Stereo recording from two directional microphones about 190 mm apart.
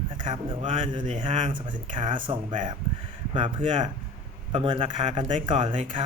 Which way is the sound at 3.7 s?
25° right (ahead or behind).